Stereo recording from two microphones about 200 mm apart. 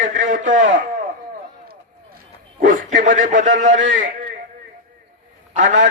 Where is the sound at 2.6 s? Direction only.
40° right (ahead or behind).